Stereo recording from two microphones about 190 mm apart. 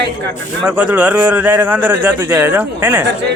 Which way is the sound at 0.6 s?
5° right (ahead or behind).